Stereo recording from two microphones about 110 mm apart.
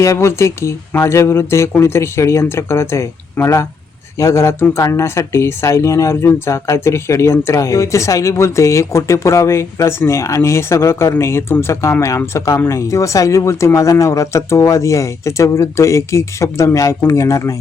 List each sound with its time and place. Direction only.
0.0 s speech: 30° left (ahead or behind)